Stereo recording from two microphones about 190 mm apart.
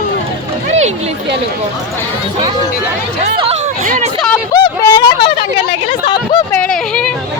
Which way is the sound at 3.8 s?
40° right (ahead or behind).